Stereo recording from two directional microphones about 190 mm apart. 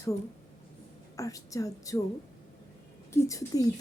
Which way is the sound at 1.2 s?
15° left (ahead or behind).